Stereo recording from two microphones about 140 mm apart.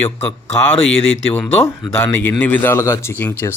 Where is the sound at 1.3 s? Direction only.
15° left (ahead or behind).